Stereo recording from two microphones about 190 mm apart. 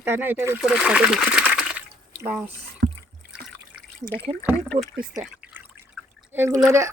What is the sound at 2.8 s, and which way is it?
Rowboat, 55° right (ahead or behind).